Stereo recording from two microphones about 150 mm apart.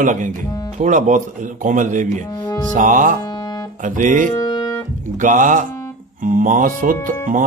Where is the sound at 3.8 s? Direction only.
60° right (ahead or behind).